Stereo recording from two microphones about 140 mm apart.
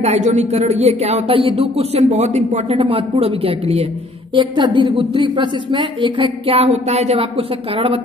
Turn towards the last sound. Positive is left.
turn(degrees=-40)  # may be behind; listen again after turning